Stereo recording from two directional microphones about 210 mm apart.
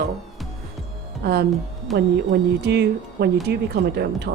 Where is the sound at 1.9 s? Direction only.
50° right (ahead or behind).